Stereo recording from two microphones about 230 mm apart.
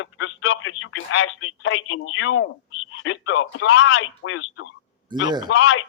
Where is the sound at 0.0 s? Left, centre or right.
Left.